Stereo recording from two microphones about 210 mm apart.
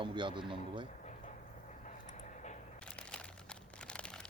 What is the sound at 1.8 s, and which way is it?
Vehicle, 35° left (ahead or behind).